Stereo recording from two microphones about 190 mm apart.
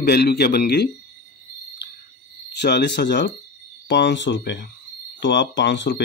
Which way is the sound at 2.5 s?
65° left (ahead or behind).